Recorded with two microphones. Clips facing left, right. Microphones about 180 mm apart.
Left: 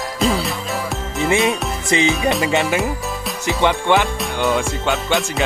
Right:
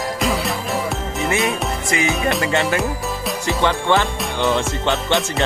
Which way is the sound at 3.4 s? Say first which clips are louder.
Left 2 dB; 15° left (ahead or behind).